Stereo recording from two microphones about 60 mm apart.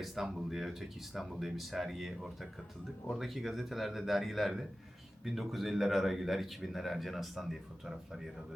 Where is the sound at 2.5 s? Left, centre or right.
Centre.